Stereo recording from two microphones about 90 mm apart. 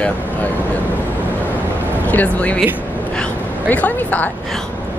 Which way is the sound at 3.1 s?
15° left (ahead or behind).